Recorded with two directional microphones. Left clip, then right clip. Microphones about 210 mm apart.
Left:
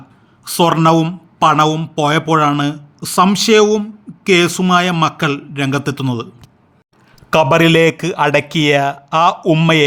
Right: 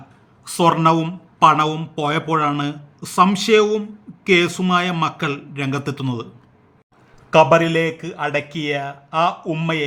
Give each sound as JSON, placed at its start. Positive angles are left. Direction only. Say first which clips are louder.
{"t": 0.4, "sound": "speech", "louder": "left 3 dB", "side_deg": 30}
{"t": 7.3, "sound": "a man's voice", "louder": "left 2 dB", "side_deg": 45}